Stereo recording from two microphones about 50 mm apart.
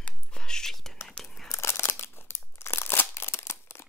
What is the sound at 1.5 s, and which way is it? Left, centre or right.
Crumpling, left.